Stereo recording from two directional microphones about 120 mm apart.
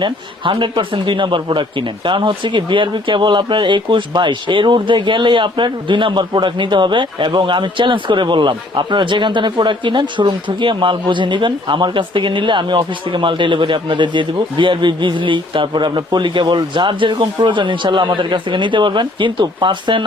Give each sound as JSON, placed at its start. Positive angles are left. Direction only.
{"t": 0.0, "sound": "speech", "side_deg": -45}